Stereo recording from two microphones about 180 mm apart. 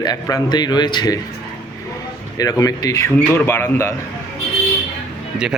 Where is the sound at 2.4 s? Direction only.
20° left (ahead or behind).